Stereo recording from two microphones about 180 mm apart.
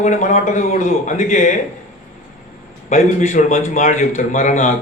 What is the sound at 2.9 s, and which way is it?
A man's voice, 45° left (ahead or behind).